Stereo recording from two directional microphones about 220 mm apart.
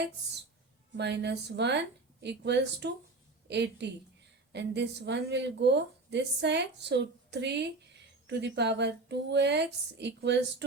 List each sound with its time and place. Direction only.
0.9 s speech: 50° right (ahead or behind)